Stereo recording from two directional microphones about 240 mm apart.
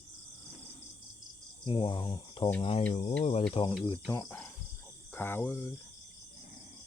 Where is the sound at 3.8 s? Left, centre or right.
Centre.